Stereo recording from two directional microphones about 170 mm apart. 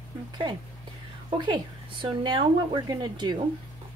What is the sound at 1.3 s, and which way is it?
A woman's voice, 30° right (ahead or behind).